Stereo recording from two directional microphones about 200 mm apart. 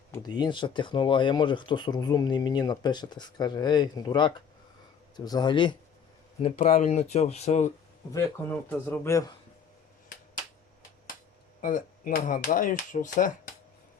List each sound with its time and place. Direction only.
0.1 s speech: 20° left (ahead or behind)
6.4 s speech: 35° left (ahead or behind)
8.1 s a man's voice: 15° left (ahead or behind)
11.6 s speech: 40° left (ahead or behind)